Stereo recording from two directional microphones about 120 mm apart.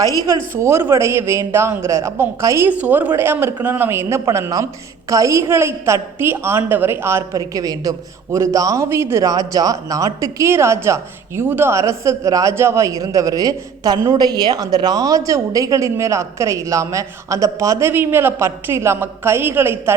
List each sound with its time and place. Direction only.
0.6 s a man's voice: 20° right (ahead or behind)